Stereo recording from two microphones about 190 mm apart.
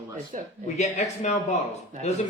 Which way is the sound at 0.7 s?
35° left (ahead or behind).